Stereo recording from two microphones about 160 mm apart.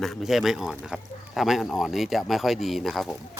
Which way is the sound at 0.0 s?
Centre (ahead or behind).